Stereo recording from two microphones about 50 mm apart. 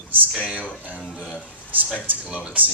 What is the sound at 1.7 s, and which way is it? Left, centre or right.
Speech, right.